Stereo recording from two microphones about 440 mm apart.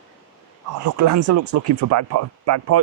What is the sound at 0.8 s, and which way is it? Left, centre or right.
Speech, right.